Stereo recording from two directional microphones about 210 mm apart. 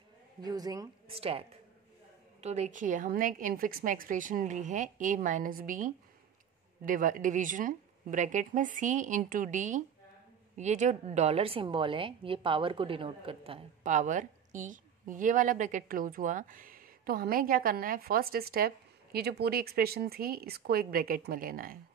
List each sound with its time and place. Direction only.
0.4 s a woman's voice: 20° right (ahead or behind)
2.4 s a woman's voice: 30° right (ahead or behind)